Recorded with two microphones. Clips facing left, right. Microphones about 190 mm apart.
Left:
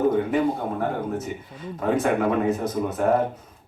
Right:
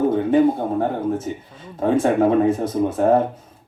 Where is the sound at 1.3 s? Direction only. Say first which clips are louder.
Right 2 dB; 30° right (ahead or behind).